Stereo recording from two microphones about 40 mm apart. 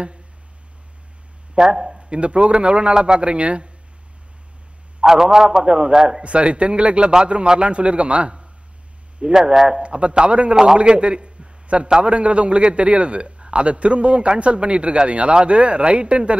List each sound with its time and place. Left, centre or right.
1.5 s speech: centre
2.0 s a man's voice: right
5.0 s a man's voice: centre
6.2 s a man's voice: right
9.2 s a man's voice: centre
9.8 s a man's voice: right
10.5 s a man's voice: centre
10.8 s a man's voice: right